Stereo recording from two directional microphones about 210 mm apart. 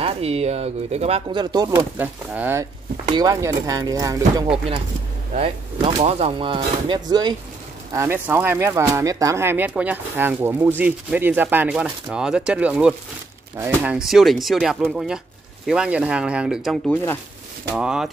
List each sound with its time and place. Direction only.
0.0 s speech: 30° right (ahead or behind); by 18.1 s 5° right (ahead or behind)